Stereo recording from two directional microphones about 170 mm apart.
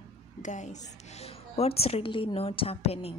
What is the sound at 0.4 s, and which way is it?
A woman's voice, 45° left (ahead or behind).